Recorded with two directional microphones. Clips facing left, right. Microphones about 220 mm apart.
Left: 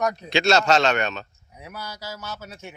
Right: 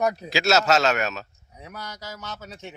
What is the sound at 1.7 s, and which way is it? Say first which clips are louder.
Speech: left 2 dB; 5° left (ahead or behind).